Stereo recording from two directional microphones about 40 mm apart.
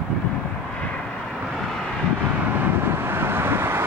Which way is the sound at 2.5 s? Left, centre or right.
Right.